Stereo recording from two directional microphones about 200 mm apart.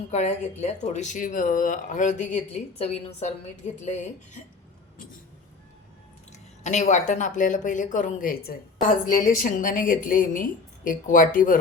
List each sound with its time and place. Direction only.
0.1 s speech: 35° left (ahead or behind)
6.3 s speech: 35° left (ahead or behind)